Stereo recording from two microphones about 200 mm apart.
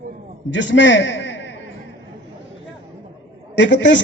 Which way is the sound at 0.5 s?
65° left (ahead or behind).